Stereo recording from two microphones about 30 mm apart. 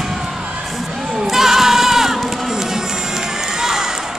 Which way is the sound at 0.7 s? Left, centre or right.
Centre.